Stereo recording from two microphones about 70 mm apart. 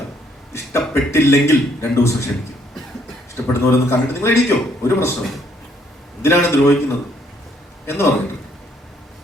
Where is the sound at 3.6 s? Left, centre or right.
Left.